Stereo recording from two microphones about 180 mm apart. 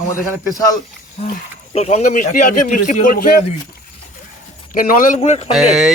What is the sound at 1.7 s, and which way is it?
Speech, 35° left (ahead or behind).